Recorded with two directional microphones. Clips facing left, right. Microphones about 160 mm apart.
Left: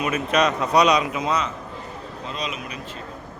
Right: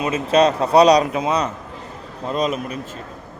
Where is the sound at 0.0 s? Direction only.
30° right (ahead or behind).